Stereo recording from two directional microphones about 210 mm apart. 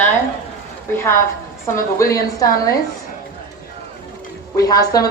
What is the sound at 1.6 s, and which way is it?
A woman's voice, 15° left (ahead or behind).